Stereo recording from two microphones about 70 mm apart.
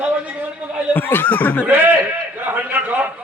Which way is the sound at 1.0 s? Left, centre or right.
Left.